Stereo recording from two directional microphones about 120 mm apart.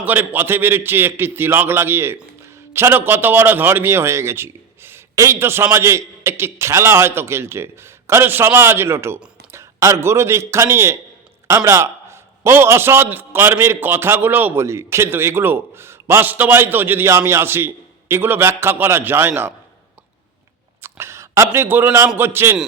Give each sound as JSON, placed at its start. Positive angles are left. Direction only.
{"t": 0.0, "sound": "a man's voice", "side_deg": -15}
{"t": 20.8, "sound": "a man's voice", "side_deg": -20}